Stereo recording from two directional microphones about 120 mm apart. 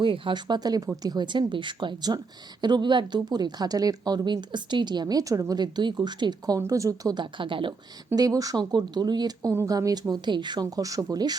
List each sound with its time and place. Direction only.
0.0 s a woman's voice: 45° right (ahead or behind)
8.1 s a woman's voice: 30° right (ahead or behind)